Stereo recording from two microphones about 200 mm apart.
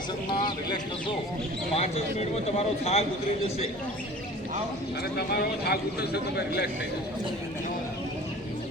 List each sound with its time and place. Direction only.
0.4 s speech: 20° left (ahead or behind)
5.1 s a man's voice: 55° left (ahead or behind)